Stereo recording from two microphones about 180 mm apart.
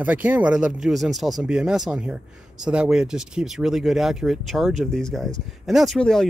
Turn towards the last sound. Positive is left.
turn(degrees=0)  # may be behind; listen again after turning